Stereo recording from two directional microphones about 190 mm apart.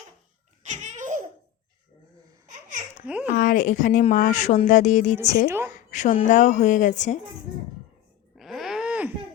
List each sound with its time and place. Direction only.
0.6 s baby laughter: 40° right (ahead or behind)
3.1 s speech: 5° right (ahead or behind)
3.3 s speech: 45° left (ahead or behind)
5.5 s a woman's voice: 10° right (ahead or behind)
5.7 s speech: 40° left (ahead or behind)
8.4 s groan: centre (ahead or behind)